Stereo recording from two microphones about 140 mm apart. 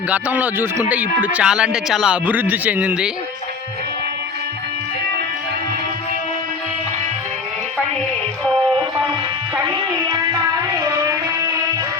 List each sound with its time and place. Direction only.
0.1 s a man's voice: 10° right (ahead or behind)
9.6 s music: 30° right (ahead or behind)